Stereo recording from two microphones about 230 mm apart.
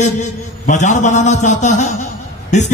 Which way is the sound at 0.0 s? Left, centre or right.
Left.